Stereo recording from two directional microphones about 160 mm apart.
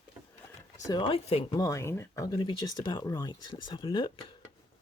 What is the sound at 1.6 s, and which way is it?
Speech, 20° left (ahead or behind).